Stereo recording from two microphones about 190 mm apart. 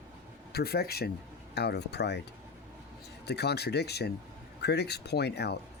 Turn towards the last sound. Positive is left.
turn(degrees=60)  # may be behind; listen again after turning